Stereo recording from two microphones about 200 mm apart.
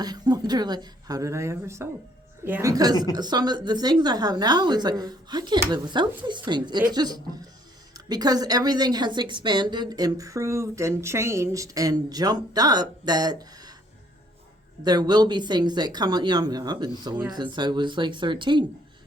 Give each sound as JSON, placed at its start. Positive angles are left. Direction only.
{"t": 0.0, "sound": "a woman's voice", "side_deg": -20}
{"t": 14.8, "sound": "a woman's voice", "side_deg": -20}